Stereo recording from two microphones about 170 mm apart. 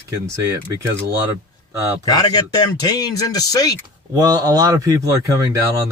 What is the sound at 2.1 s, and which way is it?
Speech, 25° left (ahead or behind).